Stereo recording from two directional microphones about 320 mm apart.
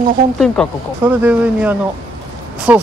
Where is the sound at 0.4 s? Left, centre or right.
Centre.